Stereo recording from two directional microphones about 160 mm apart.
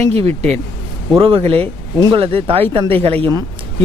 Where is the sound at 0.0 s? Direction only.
40° right (ahead or behind).